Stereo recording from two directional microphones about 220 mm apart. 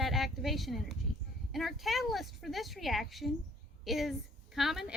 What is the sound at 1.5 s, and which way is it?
A woman's voice, centre (ahead or behind).